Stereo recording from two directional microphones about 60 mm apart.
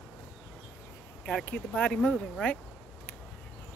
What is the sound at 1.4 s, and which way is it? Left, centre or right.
Speech, left.